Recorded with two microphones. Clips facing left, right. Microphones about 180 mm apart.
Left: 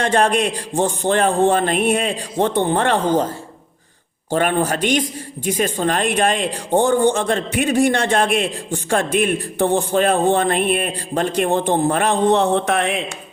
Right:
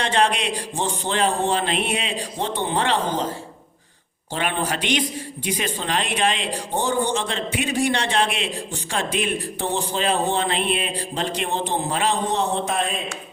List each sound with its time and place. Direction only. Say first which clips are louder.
0.0 s speech: left 5 dB; 45° left (ahead or behind)
4.3 s speech: left 7 dB; 45° left (ahead or behind); by 13.0 s 70° left (ahead or behind)